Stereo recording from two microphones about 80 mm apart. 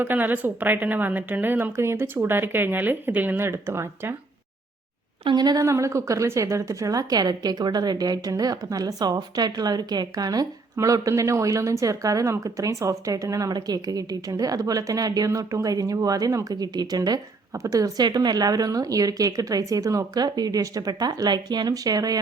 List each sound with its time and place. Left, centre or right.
0.0 s a woman's voice: right
5.2 s speech: right
5.6 s a woman's voice: right
17.5 s a woman's voice: right
21.7 s a woman's voice: right